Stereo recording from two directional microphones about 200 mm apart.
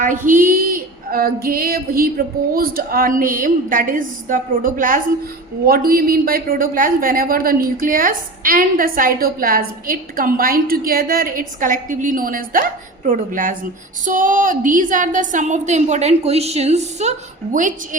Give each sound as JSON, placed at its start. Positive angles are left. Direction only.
{"t": 0.3, "sound": "a woman's voice", "side_deg": -45}